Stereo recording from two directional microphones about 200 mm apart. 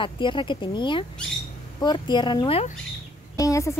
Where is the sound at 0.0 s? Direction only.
25° left (ahead or behind).